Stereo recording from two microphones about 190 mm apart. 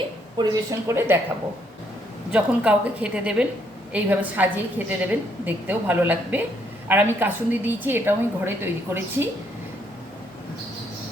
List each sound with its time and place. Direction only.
0.3 s a woman's voice: 20° right (ahead or behind)
2.3 s a woman's voice: 5° right (ahead or behind)